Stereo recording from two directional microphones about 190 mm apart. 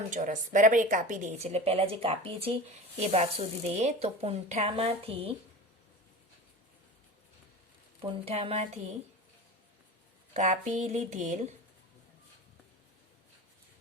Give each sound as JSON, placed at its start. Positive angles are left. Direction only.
{"t": 0.1, "sound": "speech", "side_deg": -40}
{"t": 8.0, "sound": "speech", "side_deg": -30}
{"t": 10.3, "sound": "speech", "side_deg": -40}